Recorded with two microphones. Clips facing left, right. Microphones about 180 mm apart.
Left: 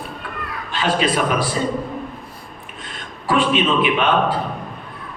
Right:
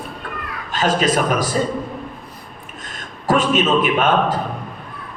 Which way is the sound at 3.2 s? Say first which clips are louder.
Right 1 dB; 45° right (ahead or behind).